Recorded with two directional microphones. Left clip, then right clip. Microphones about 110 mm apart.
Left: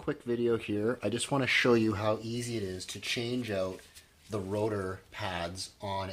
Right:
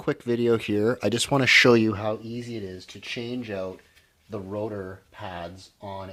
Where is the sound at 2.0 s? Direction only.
50° right (ahead or behind).